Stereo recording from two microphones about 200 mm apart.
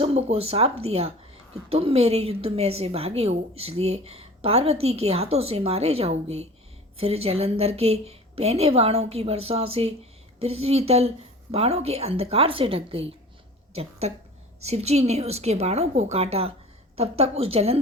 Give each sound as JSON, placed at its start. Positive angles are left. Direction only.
{"t": 0.0, "sound": "a woman's voice", "side_deg": -30}
{"t": 14.6, "sound": "a woman's voice", "side_deg": -30}